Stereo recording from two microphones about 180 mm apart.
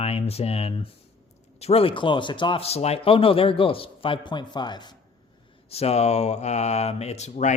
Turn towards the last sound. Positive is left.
turn(degrees=40)  # may be behind; listen again after turning